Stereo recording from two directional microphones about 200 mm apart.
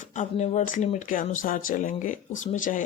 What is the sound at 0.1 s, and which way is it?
Speech, 35° left (ahead or behind).